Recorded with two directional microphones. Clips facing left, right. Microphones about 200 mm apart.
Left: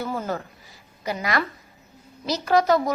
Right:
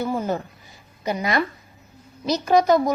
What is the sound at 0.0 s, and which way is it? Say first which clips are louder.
A woman's voice: right 4 dB; 20° right (ahead or behind).